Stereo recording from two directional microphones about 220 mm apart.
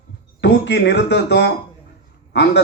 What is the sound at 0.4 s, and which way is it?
A man's voice, 50° left (ahead or behind).